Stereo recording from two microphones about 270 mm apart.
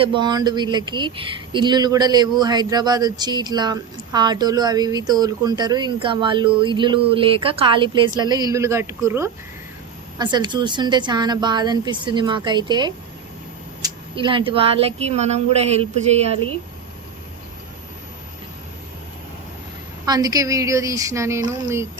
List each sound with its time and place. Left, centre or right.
0.0 s speech: centre
20.1 s speech: centre